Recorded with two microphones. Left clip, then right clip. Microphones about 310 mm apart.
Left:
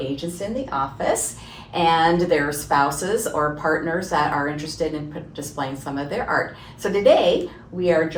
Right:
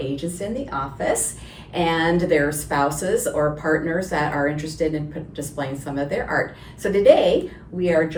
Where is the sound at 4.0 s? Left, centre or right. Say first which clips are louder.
Left 1 dB; centre.